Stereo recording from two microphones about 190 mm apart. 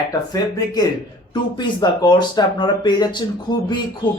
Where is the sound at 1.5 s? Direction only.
20° left (ahead or behind).